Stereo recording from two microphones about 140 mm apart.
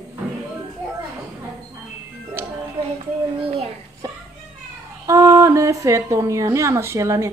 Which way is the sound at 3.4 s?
45° right (ahead or behind).